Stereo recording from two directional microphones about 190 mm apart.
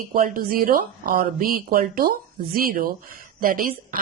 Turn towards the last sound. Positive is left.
turn(degrees=-45)  # may be behind; listen again after turning